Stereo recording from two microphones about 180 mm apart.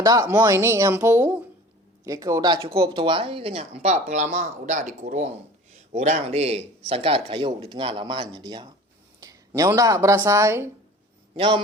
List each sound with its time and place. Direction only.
0.0 s speech: 20° right (ahead or behind)
11.3 s a man's voice: 30° right (ahead or behind)